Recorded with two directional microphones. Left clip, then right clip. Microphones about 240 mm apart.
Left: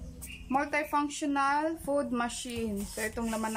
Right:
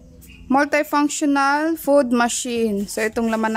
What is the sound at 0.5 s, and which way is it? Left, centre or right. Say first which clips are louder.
Speech: right 12 dB; right.